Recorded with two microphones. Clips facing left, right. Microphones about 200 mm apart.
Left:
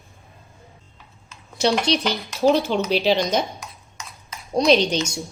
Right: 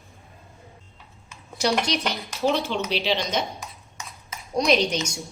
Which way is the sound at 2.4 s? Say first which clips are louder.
Left 6 dB; 40° left (ahead or behind).